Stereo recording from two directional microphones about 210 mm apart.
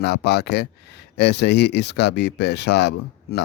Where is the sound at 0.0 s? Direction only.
50° left (ahead or behind).